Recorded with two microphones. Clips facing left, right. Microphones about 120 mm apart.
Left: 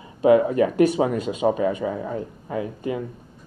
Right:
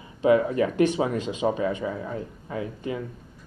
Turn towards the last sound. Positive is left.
turn(degrees=30)  # may be behind; listen again after turning